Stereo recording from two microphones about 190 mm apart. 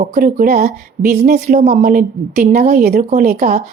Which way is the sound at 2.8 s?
55° right (ahead or behind).